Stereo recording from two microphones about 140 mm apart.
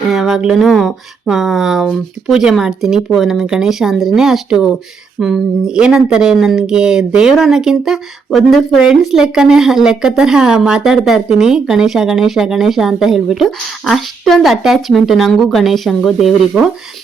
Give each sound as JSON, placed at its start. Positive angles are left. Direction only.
{"t": 0.1, "sound": "speech", "side_deg": 0}